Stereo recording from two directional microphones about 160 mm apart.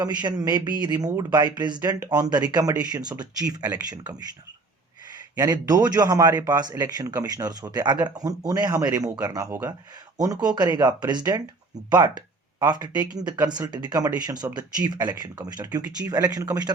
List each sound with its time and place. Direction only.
0.0 s speech: 25° right (ahead or behind)
5.4 s speech: 25° right (ahead or behind)